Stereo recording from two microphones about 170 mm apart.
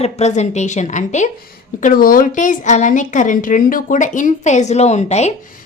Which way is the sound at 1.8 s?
55° left (ahead or behind).